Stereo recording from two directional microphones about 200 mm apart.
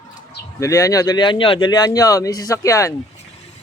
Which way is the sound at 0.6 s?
15° left (ahead or behind).